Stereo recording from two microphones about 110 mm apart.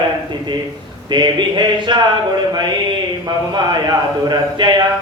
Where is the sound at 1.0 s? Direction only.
40° right (ahead or behind).